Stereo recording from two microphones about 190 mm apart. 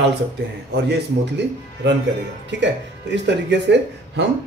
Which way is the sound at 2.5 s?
70° right (ahead or behind).